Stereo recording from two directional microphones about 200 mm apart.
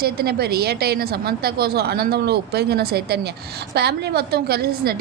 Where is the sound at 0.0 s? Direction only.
50° right (ahead or behind).